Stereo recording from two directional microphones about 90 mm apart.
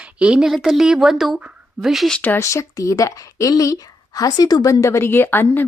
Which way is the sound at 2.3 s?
35° left (ahead or behind).